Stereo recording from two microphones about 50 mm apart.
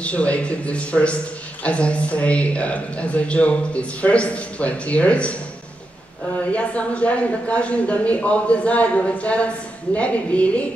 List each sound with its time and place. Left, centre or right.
0.0 s a man's voice: left
6.5 s a man's voice: left